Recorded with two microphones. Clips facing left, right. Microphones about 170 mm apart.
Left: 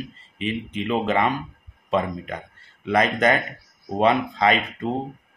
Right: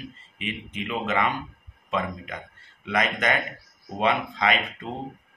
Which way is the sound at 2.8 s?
35° left (ahead or behind).